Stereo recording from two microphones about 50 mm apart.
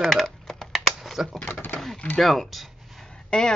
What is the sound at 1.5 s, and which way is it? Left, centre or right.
Speech, left.